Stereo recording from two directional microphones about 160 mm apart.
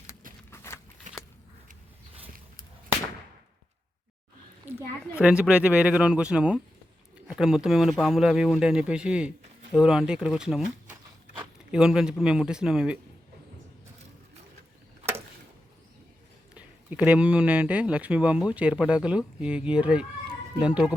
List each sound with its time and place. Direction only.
0.1 s a sound: 60° right (ahead or behind)
0.5 s biting: 15° left (ahead or behind)
1.1 s biting: 50° right (ahead or behind)
5.2 s speech: 10° right (ahead or behind)
16.6 s speech: 10° right (ahead or behind)